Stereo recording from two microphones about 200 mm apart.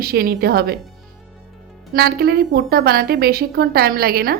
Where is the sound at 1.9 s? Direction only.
50° right (ahead or behind).